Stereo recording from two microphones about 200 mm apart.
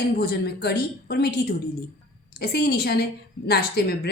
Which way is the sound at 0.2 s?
55° left (ahead or behind).